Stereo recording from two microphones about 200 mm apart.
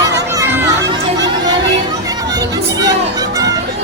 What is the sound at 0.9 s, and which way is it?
Chatter, 20° right (ahead or behind).